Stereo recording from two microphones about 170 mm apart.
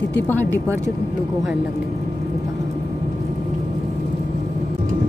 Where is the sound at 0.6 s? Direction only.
15° right (ahead or behind).